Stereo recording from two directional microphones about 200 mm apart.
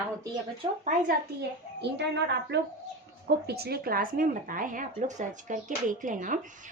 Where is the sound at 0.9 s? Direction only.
50° right (ahead or behind).